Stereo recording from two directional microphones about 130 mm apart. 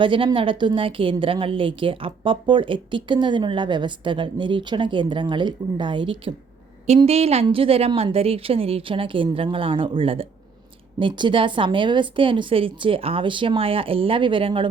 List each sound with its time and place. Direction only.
0.0 s a woman's voice: 40° right (ahead or behind)
6.8 s a woman's voice: 55° right (ahead or behind)